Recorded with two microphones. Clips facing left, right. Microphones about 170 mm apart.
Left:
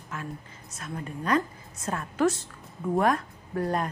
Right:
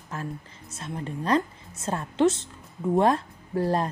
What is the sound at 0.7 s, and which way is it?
A woman's voice, 30° right (ahead or behind).